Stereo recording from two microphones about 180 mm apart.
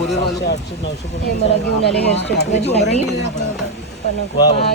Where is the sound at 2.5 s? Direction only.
35° left (ahead or behind).